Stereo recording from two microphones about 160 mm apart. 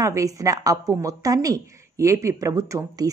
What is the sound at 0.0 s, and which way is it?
Speech, 20° right (ahead or behind).